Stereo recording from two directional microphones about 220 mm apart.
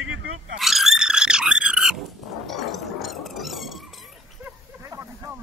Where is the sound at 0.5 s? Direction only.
Centre (ahead or behind).